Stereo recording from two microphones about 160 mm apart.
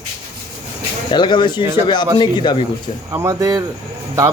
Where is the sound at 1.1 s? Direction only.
30° left (ahead or behind).